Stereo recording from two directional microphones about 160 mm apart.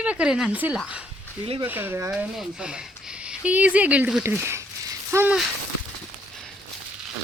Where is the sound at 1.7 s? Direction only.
10° right (ahead or behind).